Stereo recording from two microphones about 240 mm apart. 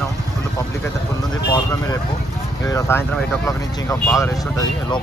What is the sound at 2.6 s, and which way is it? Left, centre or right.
Speech, centre.